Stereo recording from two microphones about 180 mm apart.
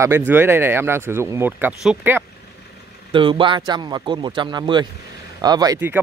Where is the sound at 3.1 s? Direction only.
30° right (ahead or behind).